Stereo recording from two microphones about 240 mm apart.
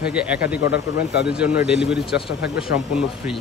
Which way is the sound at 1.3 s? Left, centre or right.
Centre.